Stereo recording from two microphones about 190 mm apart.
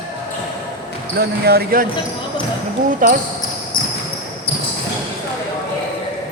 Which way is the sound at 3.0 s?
45° right (ahead or behind).